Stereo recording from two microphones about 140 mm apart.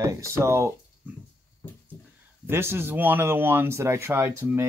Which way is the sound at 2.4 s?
15° right (ahead or behind).